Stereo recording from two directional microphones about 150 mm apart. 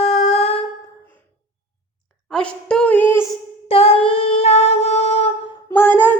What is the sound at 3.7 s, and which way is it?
Humming, 40° left (ahead or behind).